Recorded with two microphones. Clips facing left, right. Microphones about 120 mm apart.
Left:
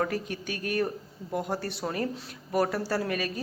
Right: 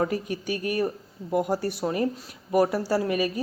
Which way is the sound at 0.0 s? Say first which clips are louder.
Right 3 dB; 10° right (ahead or behind).